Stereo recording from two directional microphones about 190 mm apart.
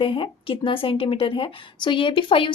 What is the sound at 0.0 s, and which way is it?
Speech, 25° left (ahead or behind).